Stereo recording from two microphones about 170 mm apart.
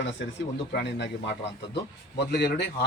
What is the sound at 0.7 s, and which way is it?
Speech, 70° left (ahead or behind).